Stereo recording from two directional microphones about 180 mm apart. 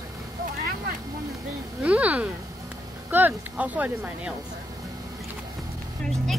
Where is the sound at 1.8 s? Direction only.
10° right (ahead or behind).